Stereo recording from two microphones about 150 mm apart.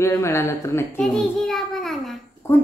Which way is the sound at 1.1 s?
5° left (ahead or behind).